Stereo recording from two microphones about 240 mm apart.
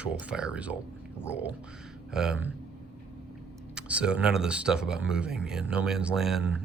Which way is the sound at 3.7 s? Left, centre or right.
Centre.